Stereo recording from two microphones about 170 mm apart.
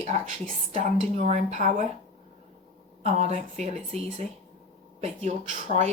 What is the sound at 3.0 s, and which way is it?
Speech, 40° right (ahead or behind).